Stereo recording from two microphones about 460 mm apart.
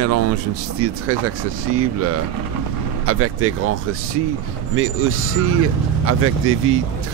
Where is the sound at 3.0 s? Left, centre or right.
Right.